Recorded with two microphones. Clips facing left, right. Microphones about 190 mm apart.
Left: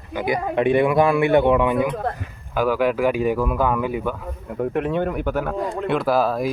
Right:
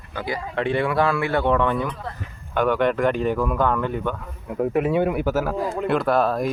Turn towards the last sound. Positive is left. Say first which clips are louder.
# left 1 dB
turn(degrees=0)  # may be behind; listen again after turning